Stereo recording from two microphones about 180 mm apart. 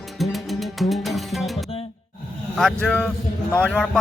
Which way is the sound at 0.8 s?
Centre (ahead or behind).